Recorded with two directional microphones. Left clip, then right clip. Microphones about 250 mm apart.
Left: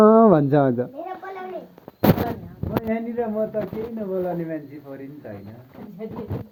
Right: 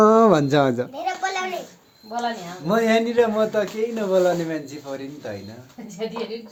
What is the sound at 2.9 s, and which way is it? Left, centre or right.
A man's voice, centre.